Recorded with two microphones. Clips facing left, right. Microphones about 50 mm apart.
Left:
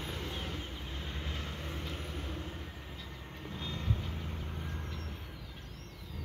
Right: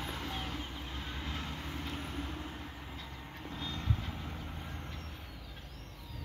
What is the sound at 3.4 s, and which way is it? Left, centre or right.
Vehicle, centre.